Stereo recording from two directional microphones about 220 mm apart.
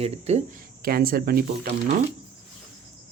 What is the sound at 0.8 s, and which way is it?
Speech, 40° right (ahead or behind).